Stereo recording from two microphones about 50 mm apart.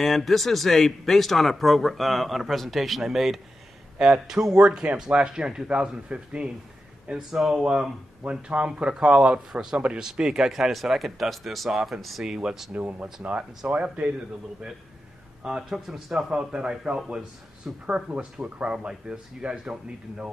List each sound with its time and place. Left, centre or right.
0.0 s speech: centre; by 6.5 s right
7.1 s speech: centre
7.6 s speech: centre
9.5 s speech: centre
12.3 s speech: centre
12.7 s speech: right
15.4 s speech: centre